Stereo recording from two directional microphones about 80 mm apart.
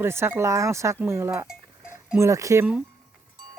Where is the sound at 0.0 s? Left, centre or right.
Right.